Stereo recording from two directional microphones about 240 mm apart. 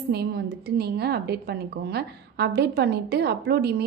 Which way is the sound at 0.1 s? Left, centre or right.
Right.